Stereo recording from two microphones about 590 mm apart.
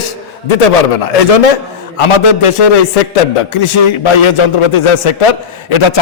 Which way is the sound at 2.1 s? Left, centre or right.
Left.